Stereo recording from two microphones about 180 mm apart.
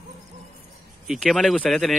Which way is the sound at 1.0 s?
Centre (ahead or behind).